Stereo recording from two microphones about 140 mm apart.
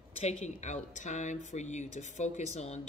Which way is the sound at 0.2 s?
55° left (ahead or behind).